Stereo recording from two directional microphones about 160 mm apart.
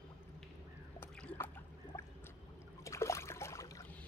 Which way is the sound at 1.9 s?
20° left (ahead or behind).